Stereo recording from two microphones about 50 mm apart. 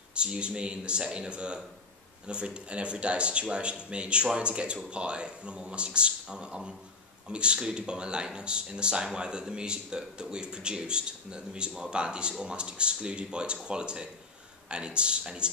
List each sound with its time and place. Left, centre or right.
0.1 s speech: right